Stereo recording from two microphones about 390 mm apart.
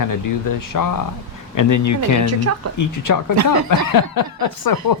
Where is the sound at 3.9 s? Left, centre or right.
Left.